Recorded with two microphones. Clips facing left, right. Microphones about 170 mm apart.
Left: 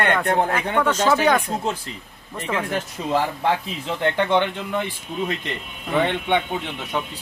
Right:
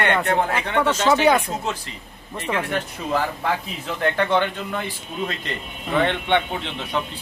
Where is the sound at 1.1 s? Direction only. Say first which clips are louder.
Right 3 dB; 10° right (ahead or behind).